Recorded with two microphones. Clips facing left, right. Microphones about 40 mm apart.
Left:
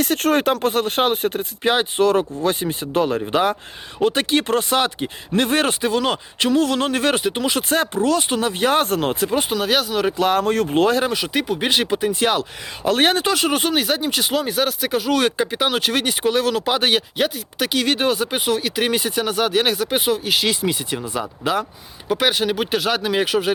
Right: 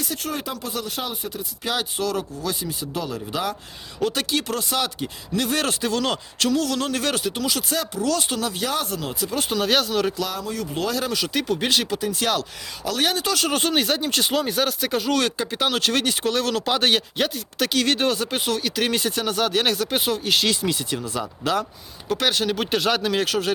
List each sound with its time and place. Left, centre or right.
0.0 s speech: left
1.7 s speech: left
8.1 s speech: left
9.5 s speech: centre
10.2 s speech: left
11.1 s speech: centre
12.9 s speech: left
13.3 s speech: centre